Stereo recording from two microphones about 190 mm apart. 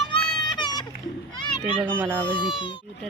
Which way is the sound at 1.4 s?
25° left (ahead or behind).